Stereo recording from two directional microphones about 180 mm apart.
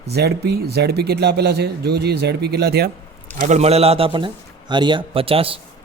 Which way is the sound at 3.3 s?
40° right (ahead or behind).